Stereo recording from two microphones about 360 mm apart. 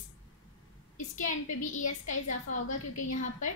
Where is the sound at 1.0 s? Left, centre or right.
Left.